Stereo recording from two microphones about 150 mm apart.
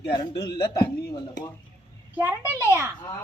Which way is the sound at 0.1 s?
30° left (ahead or behind).